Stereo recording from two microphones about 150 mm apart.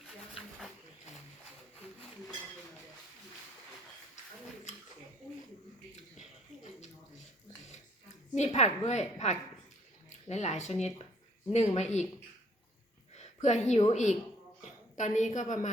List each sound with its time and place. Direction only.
8.4 s a woman's voice: 50° left (ahead or behind)
13.1 s a woman's voice: 50° left (ahead or behind)